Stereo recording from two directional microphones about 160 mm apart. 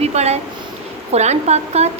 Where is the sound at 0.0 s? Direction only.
45° right (ahead or behind).